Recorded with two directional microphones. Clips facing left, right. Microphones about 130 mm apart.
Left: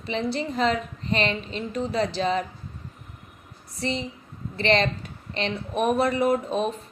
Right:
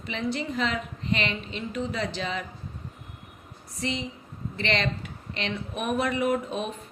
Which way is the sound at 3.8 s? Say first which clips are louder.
Left 2 dB; 35° left (ahead or behind).